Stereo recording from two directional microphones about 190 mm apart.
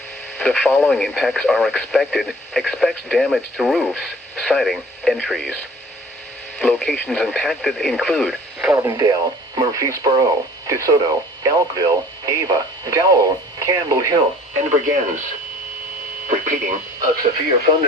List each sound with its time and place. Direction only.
0.3 s speech: 5° left (ahead or behind)
6.6 s speech: 5° left (ahead or behind)
8.7 s speech: 15° right (ahead or behind)
14.5 s speech: 40° right (ahead or behind)
16.2 s speech: 40° right (ahead or behind)